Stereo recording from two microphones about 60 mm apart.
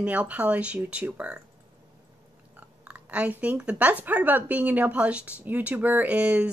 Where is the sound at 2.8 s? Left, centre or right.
Right.